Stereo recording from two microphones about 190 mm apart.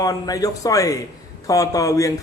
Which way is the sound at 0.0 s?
20° left (ahead or behind).